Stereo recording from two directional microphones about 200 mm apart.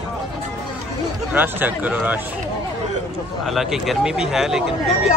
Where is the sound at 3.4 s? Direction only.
Centre (ahead or behind).